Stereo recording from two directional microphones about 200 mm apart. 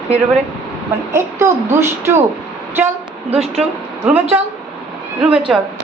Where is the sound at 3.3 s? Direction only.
30° right (ahead or behind).